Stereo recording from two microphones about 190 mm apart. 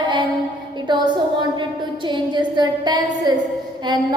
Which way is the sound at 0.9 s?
25° right (ahead or behind).